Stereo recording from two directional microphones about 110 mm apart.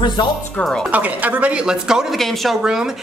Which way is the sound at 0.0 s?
45° left (ahead or behind).